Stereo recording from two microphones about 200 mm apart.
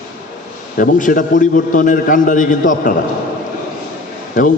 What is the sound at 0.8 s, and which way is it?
A man's voice, 45° left (ahead or behind).